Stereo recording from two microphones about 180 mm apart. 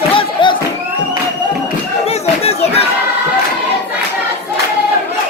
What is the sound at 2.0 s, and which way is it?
Crowd, 35° left (ahead or behind).